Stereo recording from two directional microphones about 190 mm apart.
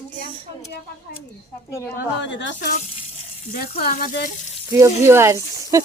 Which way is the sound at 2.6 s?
35° left (ahead or behind).